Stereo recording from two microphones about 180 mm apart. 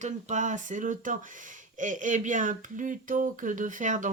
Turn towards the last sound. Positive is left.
turn(degrees=-45)  # may be behind; listen again after turning